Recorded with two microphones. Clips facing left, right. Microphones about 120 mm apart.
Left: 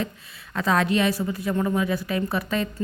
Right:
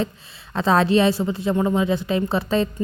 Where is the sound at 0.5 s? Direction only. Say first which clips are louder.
Right 5 dB; 30° right (ahead or behind).